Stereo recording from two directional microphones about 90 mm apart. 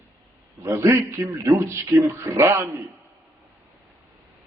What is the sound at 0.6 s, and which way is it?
A man's voice, 30° right (ahead or behind).